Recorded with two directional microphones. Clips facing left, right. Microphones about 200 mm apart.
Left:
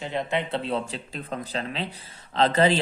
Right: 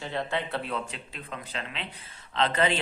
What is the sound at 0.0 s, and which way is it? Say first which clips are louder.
A man's voice: left 3 dB; 20° left (ahead or behind).